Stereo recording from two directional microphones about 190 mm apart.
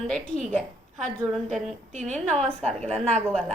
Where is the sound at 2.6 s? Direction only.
35° right (ahead or behind).